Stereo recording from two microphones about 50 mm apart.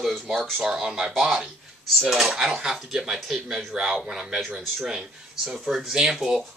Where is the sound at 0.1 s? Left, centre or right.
Centre.